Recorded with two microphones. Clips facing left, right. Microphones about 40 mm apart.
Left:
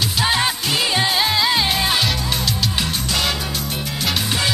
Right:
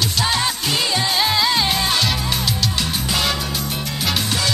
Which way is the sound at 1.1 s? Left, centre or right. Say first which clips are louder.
Even; centre.